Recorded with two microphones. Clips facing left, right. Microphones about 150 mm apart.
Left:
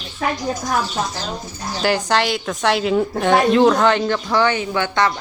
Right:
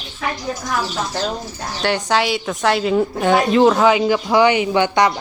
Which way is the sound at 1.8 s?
Centre (ahead or behind).